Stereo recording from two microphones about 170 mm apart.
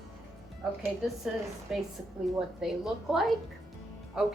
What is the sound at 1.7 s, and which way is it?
A woman's voice, 5° right (ahead or behind).